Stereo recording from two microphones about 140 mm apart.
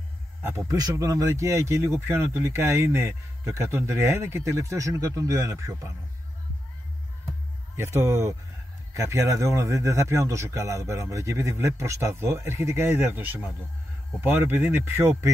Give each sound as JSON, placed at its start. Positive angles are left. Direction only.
{"t": 0.4, "sound": "a man's voice", "side_deg": -15}
{"t": 0.7, "sound": "speech", "side_deg": -25}
{"t": 7.7, "sound": "speech", "side_deg": -20}